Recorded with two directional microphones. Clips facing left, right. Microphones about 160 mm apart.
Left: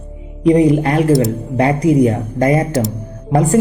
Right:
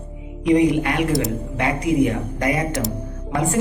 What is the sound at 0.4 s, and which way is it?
Speech, 35° left (ahead or behind).